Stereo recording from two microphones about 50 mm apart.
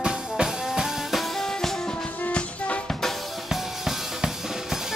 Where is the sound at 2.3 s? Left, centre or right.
Left.